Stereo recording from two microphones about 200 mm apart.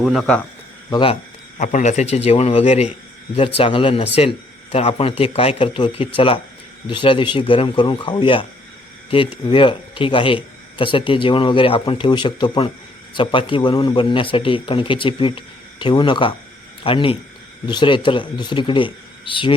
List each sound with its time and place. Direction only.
0.0 s speech: centre (ahead or behind)
0.9 s a man's voice: 25° left (ahead or behind)